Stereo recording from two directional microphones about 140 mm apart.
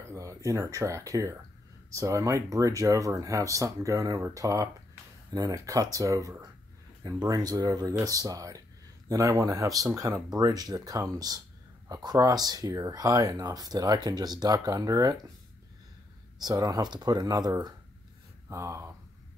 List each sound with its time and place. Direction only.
0.1 s speech: 20° right (ahead or behind)
16.3 s speech: 25° right (ahead or behind)